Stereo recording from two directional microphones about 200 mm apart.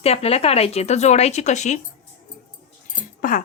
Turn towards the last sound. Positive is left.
turn(degrees=45)  # may be behind; listen again after turning